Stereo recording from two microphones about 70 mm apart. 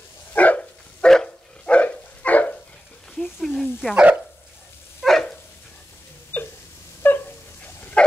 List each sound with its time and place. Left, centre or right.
0.3 s dog: left
3.2 s a sound: centre
3.9 s frying: centre
5.0 s dog: centre
6.3 s hiccup: left
7.0 s a sound: left